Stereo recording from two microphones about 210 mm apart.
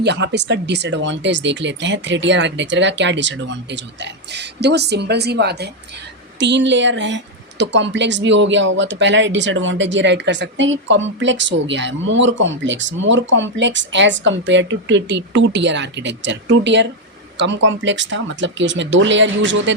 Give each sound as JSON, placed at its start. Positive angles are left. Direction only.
{"t": 0.0, "sound": "speech", "side_deg": -55}